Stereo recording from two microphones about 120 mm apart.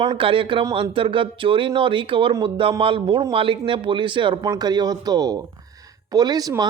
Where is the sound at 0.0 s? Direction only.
45° right (ahead or behind).